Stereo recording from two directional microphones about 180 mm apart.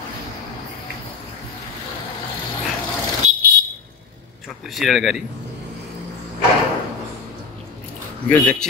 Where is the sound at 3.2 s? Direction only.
40° right (ahead or behind).